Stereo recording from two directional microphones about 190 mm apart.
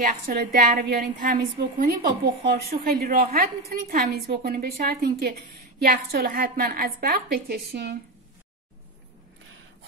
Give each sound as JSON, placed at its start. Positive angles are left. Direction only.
{"t": 0.0, "sound": "a woman's voice", "side_deg": -55}